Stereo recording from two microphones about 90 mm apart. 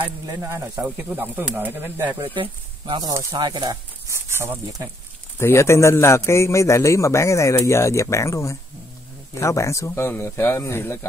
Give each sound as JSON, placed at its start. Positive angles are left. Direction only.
{"t": 0.3, "sound": "speech", "side_deg": -30}
{"t": 0.7, "sound": "speech", "side_deg": -15}
{"t": 2.2, "sound": "speech", "side_deg": -75}
{"t": 3.0, "sound": "speech", "side_deg": -40}
{"t": 3.3, "sound": "speech", "side_deg": -55}
{"t": 5.4, "sound": "a man's voice", "side_deg": 30}